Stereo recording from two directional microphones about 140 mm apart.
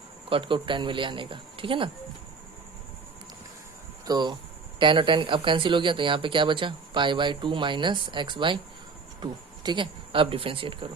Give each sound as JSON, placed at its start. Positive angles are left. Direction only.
{"t": 0.3, "sound": "speech", "side_deg": -40}
{"t": 4.0, "sound": "speech", "side_deg": -30}